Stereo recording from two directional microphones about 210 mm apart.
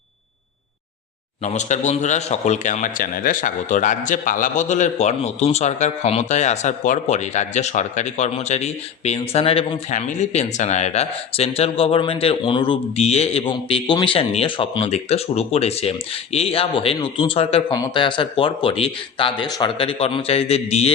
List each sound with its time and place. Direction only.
1.5 s speech: 35° left (ahead or behind)